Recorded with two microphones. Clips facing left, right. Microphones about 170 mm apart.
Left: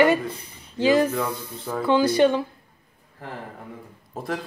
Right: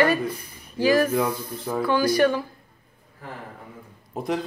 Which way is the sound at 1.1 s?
10° right (ahead or behind).